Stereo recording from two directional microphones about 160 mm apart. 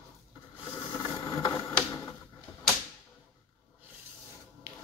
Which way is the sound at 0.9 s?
25° left (ahead or behind).